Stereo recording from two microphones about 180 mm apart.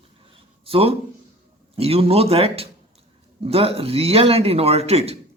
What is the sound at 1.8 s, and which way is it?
A woman's voice, 35° right (ahead or behind).